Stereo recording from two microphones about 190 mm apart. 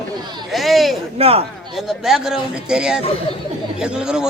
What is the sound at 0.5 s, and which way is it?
Speech, centre (ahead or behind).